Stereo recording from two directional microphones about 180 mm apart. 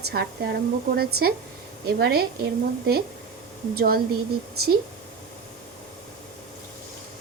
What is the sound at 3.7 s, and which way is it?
Speech, 60° right (ahead or behind).